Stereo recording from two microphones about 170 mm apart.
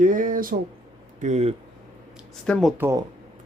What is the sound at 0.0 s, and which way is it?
Speech, 50° right (ahead or behind).